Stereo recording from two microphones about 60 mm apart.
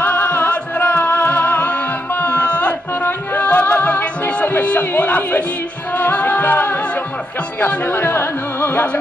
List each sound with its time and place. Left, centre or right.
0.0 s music: left
7.6 s speech: left